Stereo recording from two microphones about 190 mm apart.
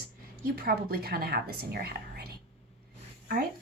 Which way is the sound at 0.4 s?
55° right (ahead or behind).